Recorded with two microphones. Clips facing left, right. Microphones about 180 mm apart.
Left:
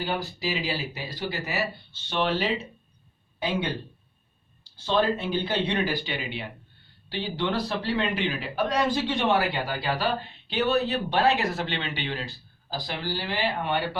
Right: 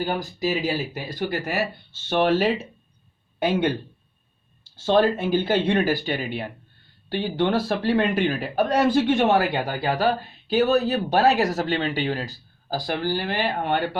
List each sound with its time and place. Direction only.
0.3 s speech: 45° right (ahead or behind)
4.9 s speech: 50° right (ahead or behind)